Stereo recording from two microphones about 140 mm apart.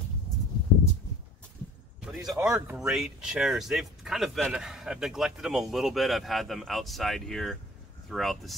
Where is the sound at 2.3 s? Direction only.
20° right (ahead or behind).